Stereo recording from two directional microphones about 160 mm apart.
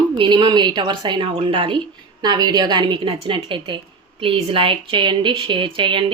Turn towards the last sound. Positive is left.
turn(degrees=-30)  # may be behind; listen again after turning